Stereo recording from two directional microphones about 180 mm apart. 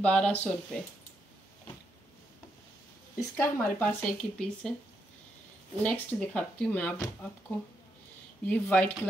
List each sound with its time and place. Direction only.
0.0 s speech: 5° left (ahead or behind)
3.2 s speech: 10° left (ahead or behind)
5.8 s speech: 5° left (ahead or behind)
8.5 s speech: 10° left (ahead or behind)